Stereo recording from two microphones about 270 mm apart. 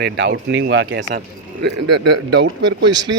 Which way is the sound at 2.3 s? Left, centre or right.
Right.